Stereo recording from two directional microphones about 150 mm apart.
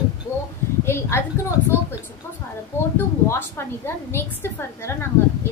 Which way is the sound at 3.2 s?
15° left (ahead or behind).